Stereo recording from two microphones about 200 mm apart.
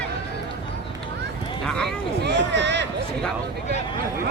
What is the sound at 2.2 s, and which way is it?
Speech, 60° right (ahead or behind).